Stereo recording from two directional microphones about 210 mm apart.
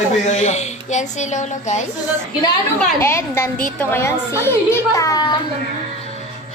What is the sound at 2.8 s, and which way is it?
A woman's voice, 10° left (ahead or behind).